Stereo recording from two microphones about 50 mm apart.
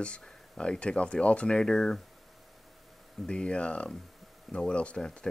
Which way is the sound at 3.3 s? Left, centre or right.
Centre.